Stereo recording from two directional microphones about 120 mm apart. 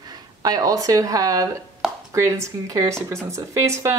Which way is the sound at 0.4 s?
30° right (ahead or behind).